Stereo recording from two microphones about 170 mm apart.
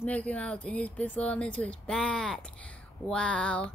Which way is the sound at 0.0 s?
10° left (ahead or behind).